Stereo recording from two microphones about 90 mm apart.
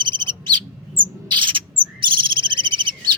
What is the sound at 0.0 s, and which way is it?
Bird, 60° right (ahead or behind).